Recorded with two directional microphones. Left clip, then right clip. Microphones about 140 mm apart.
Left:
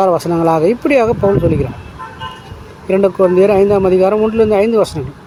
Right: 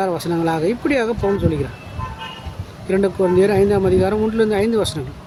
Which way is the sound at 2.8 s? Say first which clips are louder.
Left 6 dB; 10° left (ahead or behind).